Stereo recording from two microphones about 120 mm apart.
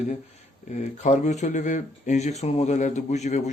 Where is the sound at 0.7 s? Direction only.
85° left.